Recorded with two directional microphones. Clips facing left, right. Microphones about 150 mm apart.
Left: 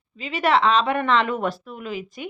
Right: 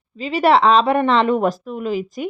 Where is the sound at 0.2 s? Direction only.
35° right (ahead or behind).